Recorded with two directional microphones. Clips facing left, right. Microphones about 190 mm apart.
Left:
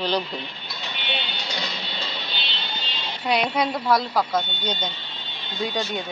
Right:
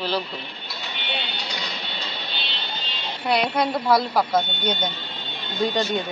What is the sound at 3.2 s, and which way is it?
Speech, 10° left (ahead or behind).